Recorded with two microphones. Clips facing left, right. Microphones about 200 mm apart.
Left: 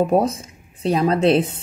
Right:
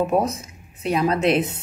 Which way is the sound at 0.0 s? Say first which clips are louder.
Left 3 dB; 30° left (ahead or behind).